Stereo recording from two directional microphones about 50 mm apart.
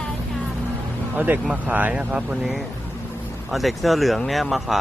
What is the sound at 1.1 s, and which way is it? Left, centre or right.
Speech, right.